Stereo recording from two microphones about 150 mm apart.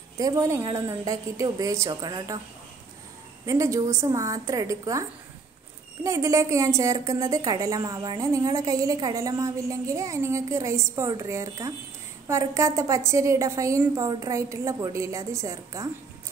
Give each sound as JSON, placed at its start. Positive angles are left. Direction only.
{"t": 0.2, "sound": "speech", "side_deg": -20}
{"t": 3.4, "sound": "speech", "side_deg": -20}
{"t": 6.0, "sound": "speech", "side_deg": -20}